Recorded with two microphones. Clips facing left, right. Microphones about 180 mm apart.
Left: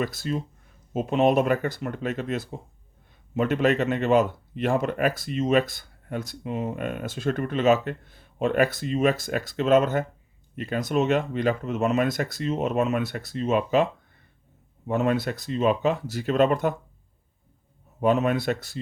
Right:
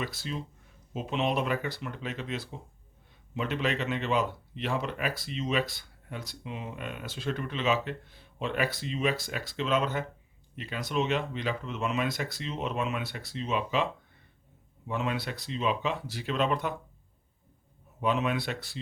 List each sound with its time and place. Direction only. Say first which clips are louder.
0.0 s speech: left 8 dB; 45° left (ahead or behind)
14.8 s speech: left 8 dB; 45° left (ahead or behind)
18.0 s speech: left 7 dB; 45° left (ahead or behind)